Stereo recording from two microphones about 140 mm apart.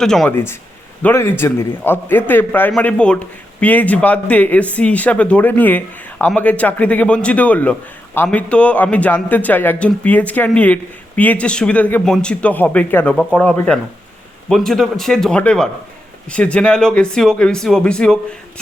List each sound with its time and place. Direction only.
0.0 s a man's voice: 5° left (ahead or behind)
1.0 s a man's voice: 15° left (ahead or behind)